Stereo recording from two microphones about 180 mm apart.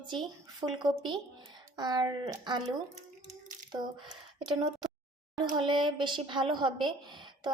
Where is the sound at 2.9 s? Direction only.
40° right (ahead or behind).